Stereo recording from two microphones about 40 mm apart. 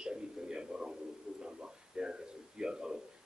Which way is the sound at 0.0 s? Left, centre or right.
Right.